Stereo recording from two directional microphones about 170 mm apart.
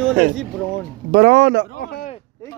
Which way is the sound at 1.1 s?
70° right (ahead or behind).